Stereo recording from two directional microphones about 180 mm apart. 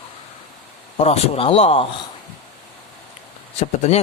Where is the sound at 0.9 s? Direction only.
35° left (ahead or behind).